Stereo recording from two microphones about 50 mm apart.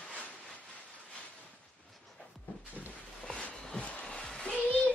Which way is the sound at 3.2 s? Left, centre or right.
Centre.